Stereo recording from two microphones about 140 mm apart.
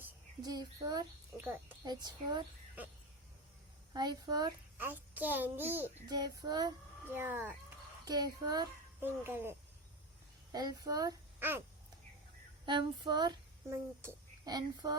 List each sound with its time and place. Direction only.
0.4 s child singing: 30° right (ahead or behind)
1.8 s female singing: 30° right (ahead or behind)
3.9 s child singing: 30° right (ahead or behind)
4.8 s a child's voice: 15° right (ahead or behind)
6.1 s child singing: 30° right (ahead or behind)
7.1 s a child's voice: 15° right (ahead or behind)
8.0 s child singing: 30° right (ahead or behind)
9.0 s a child's voice: 15° right (ahead or behind)
10.5 s child singing: 30° right (ahead or behind)
11.3 s a sound: 15° right (ahead or behind)
12.6 s female singing: 35° right (ahead or behind)
13.7 s speech: 20° right (ahead or behind)